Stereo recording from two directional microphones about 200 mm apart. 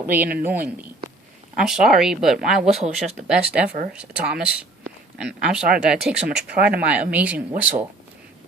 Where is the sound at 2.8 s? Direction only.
35° right (ahead or behind).